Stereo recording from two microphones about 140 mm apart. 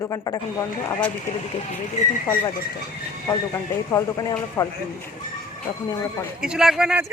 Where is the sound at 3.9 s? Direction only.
25° left (ahead or behind).